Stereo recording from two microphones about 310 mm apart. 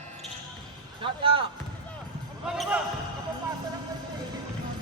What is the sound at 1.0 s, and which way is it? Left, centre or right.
Speech, centre.